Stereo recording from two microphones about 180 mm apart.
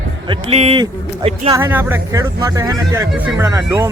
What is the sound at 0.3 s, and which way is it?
Speech, 30° right (ahead or behind).